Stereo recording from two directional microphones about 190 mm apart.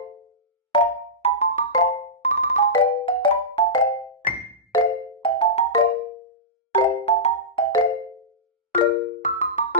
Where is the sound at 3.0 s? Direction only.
25° left (ahead or behind).